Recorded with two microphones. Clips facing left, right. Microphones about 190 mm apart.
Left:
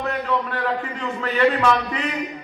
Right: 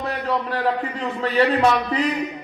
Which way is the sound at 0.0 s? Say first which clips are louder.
Even; 35° right (ahead or behind).